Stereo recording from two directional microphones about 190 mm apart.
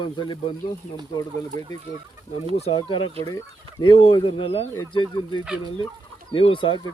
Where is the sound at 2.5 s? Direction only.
30° left (ahead or behind).